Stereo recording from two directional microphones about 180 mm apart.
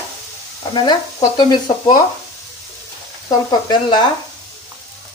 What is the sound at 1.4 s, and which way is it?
Speech, 25° left (ahead or behind).